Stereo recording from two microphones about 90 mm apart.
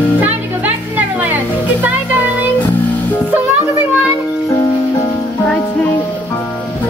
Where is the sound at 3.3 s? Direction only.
20° right (ahead or behind).